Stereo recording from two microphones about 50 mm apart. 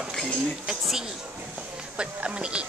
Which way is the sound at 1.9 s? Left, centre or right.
Right.